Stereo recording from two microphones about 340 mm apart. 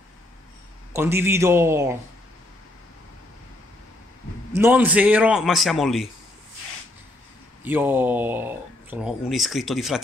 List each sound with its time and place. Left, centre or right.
0.9 s a man's voice: centre
4.6 s speech: centre
7.6 s speech: centre